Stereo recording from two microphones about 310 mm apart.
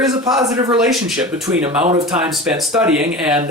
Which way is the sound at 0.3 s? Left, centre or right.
Centre.